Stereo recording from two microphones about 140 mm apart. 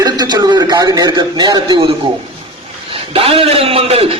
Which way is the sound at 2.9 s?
40° right (ahead or behind).